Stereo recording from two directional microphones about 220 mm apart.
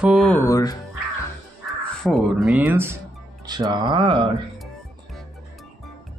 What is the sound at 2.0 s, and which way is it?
Speech, centre (ahead or behind).